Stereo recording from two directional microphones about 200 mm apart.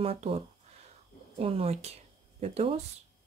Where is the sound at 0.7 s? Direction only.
30° right (ahead or behind).